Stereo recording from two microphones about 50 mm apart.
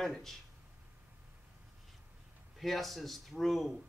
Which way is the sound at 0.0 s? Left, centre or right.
Centre.